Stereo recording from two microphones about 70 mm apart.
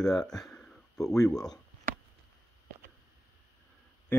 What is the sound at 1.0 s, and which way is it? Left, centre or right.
Speech, left.